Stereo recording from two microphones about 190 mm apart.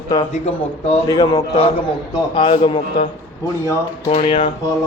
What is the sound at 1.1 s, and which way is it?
A man's voice, 20° left (ahead or behind).